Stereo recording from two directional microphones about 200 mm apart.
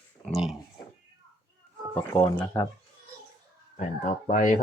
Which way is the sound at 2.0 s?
10° left (ahead or behind).